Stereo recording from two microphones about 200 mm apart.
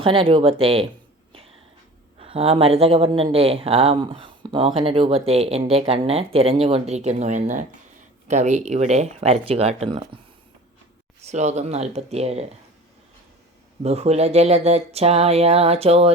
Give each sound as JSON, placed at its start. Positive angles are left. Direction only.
{"t": 0.0, "sound": "speech", "side_deg": -25}
{"t": 2.1, "sound": "speech", "side_deg": -30}
{"t": 11.2, "sound": "speech", "side_deg": -35}
{"t": 13.8, "sound": "speech", "side_deg": -30}